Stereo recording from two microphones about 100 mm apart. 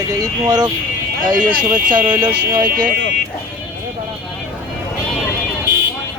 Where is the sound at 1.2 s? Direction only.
15° right (ahead or behind).